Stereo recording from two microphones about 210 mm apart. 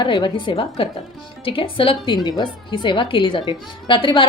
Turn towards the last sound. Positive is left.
turn(degrees=25)  # may be behind; listen again after turning